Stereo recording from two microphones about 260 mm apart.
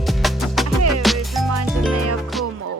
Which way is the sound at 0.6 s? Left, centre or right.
Right.